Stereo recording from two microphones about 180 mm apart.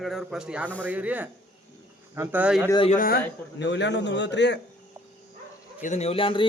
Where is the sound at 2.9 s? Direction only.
50° left (ahead or behind).